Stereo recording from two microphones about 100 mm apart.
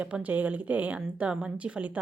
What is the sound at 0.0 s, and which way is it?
Speech, 15° right (ahead or behind).